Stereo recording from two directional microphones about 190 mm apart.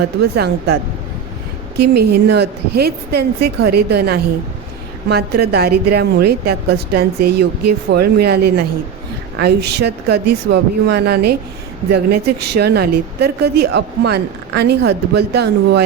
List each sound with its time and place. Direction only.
0.2 s a woman's voice: 55° right (ahead or behind)
1.8 s a woman's voice: 60° right (ahead or behind)